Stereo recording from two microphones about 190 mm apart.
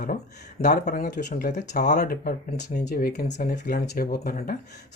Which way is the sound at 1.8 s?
45° left (ahead or behind).